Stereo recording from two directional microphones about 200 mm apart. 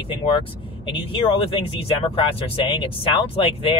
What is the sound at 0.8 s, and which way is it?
Speech, 25° left (ahead or behind).